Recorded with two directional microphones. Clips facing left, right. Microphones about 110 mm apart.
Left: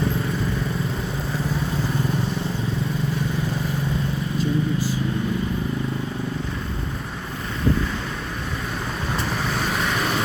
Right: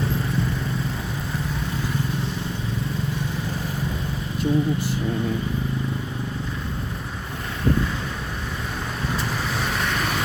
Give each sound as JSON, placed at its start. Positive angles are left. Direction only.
{"t": 4.4, "sound": "vehicle", "side_deg": -60}